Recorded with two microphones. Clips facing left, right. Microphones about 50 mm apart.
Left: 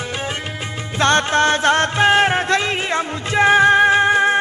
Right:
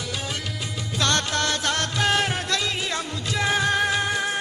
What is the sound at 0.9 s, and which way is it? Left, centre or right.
Music, left.